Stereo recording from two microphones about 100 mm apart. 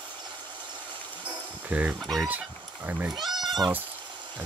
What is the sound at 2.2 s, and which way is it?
Speech, 15° right (ahead or behind).